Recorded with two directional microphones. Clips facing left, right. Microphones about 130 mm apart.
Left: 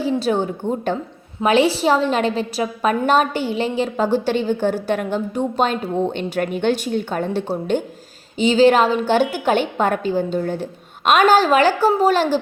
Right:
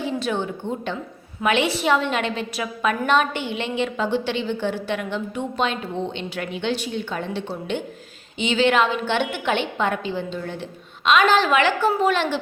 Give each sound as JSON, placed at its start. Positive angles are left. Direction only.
{"t": 0.0, "sound": "a woman's voice", "side_deg": 35}